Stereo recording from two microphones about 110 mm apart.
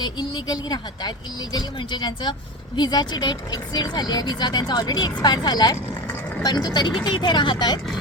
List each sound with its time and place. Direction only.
0.0 s speech: 40° left (ahead or behind)